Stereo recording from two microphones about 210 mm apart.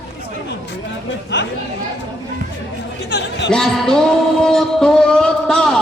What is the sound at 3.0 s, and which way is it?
Speech, 50° left (ahead or behind).